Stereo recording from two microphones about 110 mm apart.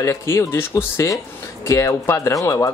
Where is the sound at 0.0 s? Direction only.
25° left (ahead or behind).